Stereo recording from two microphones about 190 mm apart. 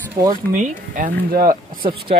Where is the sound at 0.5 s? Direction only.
40° right (ahead or behind).